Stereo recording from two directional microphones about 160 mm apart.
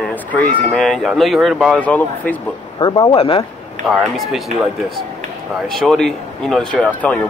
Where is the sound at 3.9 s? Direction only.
5° right (ahead or behind).